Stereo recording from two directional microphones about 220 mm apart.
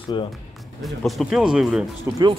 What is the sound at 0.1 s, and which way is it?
Speech, 20° left (ahead or behind).